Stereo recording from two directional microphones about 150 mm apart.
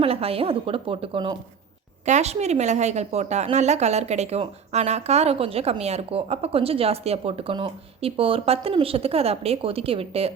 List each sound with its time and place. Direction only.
0.0 s a woman's voice: 40° right (ahead or behind)
2.0 s a woman's voice: 50° right (ahead or behind)